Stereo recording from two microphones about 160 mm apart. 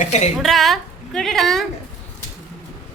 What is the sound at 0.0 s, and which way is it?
Speech, 45° left (ahead or behind).